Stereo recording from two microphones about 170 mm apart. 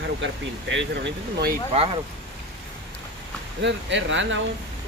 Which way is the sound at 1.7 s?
30° right (ahead or behind).